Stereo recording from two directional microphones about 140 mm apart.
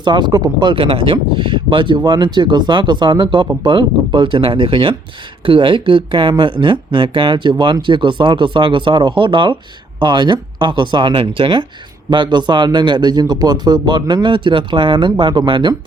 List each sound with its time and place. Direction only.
0.0 s speech: 30° right (ahead or behind)